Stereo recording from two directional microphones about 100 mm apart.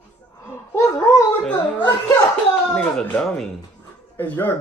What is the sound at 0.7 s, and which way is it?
Speech, 30° left (ahead or behind).